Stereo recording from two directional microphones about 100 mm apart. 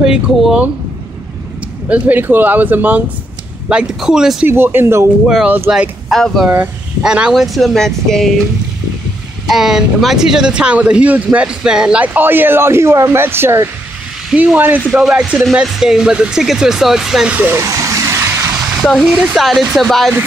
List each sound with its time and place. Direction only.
0.0 s speech: 5° right (ahead or behind)
1.9 s speech: 15° right (ahead or behind)
4.5 s speech: 25° right (ahead or behind)
5.2 s speech: 5° right (ahead or behind)
9.5 s speech: 5° right (ahead or behind)
14.9 s speech: 5° right (ahead or behind)
17.4 s speech: 20° right (ahead or behind)
17.6 s vehicle: 30° right (ahead or behind)
18.8 s speech: centre (ahead or behind)